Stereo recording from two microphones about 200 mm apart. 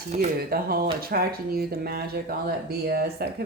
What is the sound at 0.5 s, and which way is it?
Speech, 50° right (ahead or behind).